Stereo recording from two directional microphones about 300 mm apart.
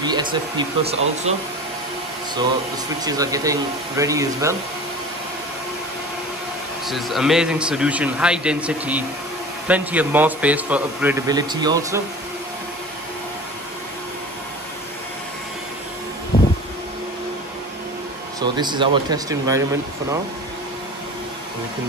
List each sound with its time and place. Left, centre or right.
0.0 s speech: centre
3.0 s speech: centre
6.9 s speech: centre
16.3 s vehicle: left
18.4 s speech: centre